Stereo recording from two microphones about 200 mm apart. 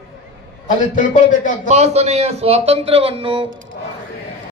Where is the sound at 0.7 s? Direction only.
40° left (ahead or behind).